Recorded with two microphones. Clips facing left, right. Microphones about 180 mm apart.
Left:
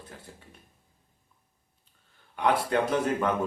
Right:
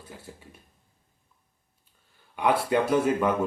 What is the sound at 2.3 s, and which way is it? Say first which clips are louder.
Speech: right 2 dB; 10° right (ahead or behind).